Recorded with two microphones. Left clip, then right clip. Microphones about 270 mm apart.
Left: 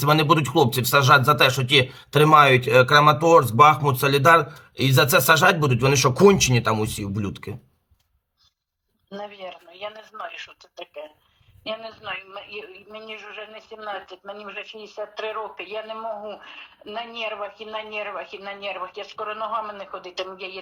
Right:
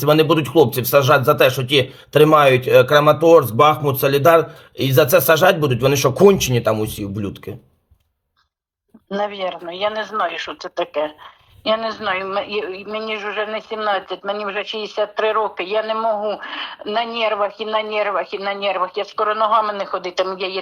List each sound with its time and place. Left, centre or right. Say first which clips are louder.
0.0 s speech: right 4 dB; centre
9.0 s a man's voice: right 13 dB; right